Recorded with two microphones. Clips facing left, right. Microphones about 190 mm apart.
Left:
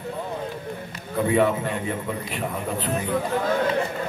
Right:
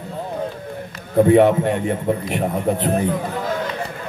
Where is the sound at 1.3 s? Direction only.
65° right (ahead or behind).